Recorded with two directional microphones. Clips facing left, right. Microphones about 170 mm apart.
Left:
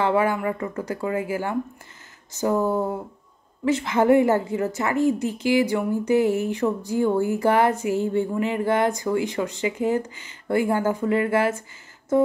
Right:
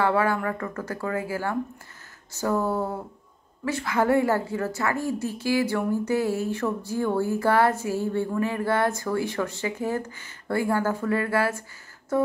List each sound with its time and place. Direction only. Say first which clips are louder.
0.0 s a woman's voice: left 2 dB; 15° left (ahead or behind)